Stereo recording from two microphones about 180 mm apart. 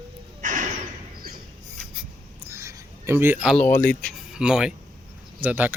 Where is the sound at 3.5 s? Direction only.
10° left (ahead or behind).